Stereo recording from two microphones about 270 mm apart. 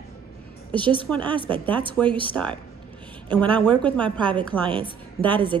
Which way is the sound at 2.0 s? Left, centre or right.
Centre.